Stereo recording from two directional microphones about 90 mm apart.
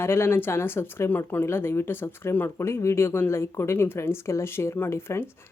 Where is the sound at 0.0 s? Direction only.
30° left (ahead or behind).